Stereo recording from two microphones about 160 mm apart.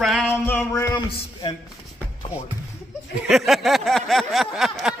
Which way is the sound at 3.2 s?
Centre (ahead or behind).